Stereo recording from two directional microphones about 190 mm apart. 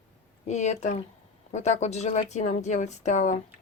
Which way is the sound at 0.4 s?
35° left (ahead or behind).